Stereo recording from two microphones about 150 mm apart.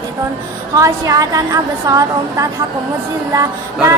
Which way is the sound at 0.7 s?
25° right (ahead or behind).